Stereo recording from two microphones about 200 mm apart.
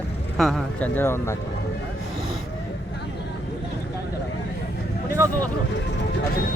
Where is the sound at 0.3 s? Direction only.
Centre (ahead or behind).